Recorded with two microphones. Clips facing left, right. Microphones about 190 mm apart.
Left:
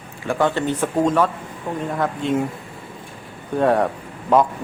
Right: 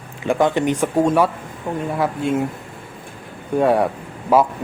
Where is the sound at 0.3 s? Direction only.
15° right (ahead or behind).